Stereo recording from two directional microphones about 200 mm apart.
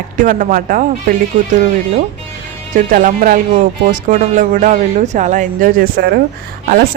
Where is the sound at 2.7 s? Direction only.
40° right (ahead or behind).